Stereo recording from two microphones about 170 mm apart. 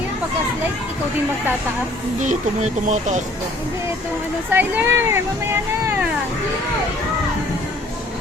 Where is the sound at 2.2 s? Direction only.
45° right (ahead or behind).